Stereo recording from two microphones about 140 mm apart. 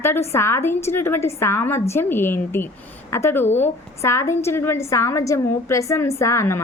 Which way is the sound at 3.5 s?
50° left (ahead or behind).